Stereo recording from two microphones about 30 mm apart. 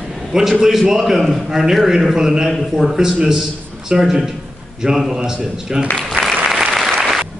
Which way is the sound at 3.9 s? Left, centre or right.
Right.